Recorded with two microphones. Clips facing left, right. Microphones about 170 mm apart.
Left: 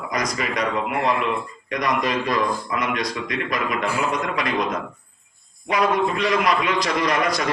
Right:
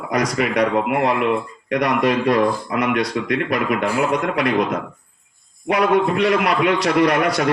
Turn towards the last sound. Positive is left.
turn(degrees=-65)  # may be behind; listen again after turning